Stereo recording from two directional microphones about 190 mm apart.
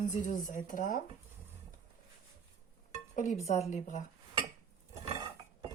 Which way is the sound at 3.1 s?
40° left (ahead or behind).